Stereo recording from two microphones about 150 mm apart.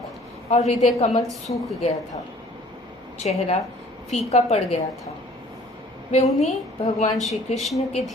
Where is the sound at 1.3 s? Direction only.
Centre (ahead or behind).